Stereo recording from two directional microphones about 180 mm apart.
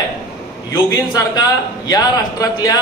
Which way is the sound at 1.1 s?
20° left (ahead or behind).